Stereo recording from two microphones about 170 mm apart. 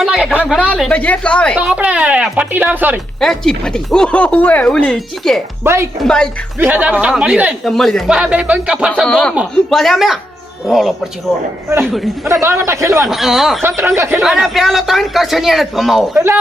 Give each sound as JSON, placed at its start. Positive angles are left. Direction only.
{"t": 0.0, "sound": "a sound", "side_deg": 0}
{"t": 0.9, "sound": "a woman's voice", "side_deg": 10}
{"t": 1.5, "sound": "speech", "side_deg": -5}
{"t": 3.2, "sound": "speech", "side_deg": 5}
{"t": 5.6, "sound": "speech", "side_deg": -15}
{"t": 6.0, "sound": "speech", "side_deg": 5}
{"t": 6.6, "sound": "speech", "side_deg": -10}
{"t": 9.0, "sound": "speech", "side_deg": 5}
{"t": 12.3, "sound": "speech", "side_deg": -15}
{"t": 13.1, "sound": "speech", "side_deg": 0}
{"t": 13.6, "sound": "speech", "side_deg": -15}
{"t": 14.2, "sound": "speech", "side_deg": 0}
{"t": 16.1, "sound": "speech", "side_deg": -15}